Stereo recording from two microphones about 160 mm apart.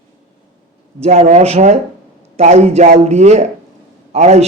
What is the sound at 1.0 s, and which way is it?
A man's voice, 45° right (ahead or behind).